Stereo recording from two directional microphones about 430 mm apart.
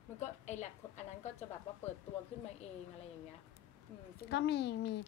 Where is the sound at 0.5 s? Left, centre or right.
Centre.